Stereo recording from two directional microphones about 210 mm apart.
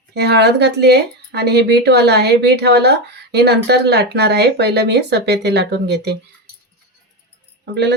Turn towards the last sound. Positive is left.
turn(degrees=-55)  # may be behind; listen again after turning